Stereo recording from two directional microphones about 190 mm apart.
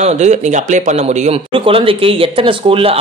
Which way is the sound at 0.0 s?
35° right (ahead or behind).